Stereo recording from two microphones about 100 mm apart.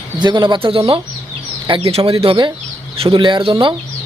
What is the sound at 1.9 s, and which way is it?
Speech, 75° right (ahead or behind).